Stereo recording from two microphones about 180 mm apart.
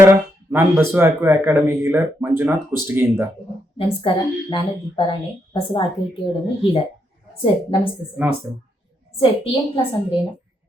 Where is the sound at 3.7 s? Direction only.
30° left (ahead or behind).